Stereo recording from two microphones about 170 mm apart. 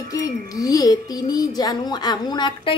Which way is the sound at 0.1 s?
20° left (ahead or behind).